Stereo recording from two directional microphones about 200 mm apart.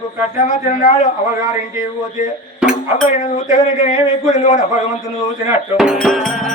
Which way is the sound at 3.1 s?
35° left (ahead or behind).